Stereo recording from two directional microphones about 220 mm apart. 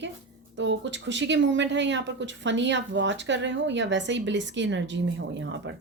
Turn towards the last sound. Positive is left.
turn(degrees=-55)  # may be behind; listen again after turning